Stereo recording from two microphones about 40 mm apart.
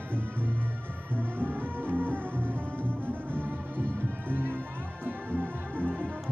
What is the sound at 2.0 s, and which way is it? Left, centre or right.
Music, left.